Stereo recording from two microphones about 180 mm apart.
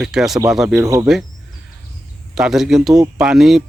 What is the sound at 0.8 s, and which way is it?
Speech, 20° right (ahead or behind).